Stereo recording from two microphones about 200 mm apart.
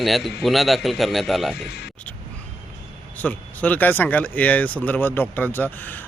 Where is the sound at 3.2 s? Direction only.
5° left (ahead or behind).